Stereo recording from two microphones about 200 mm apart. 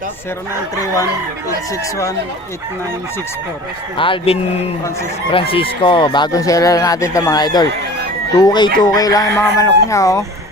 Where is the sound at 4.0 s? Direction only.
25° left (ahead or behind).